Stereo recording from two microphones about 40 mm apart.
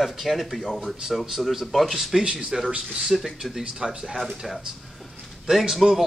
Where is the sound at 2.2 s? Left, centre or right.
Right.